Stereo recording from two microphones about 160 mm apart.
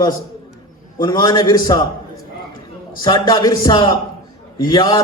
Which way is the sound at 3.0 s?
30° left (ahead or behind).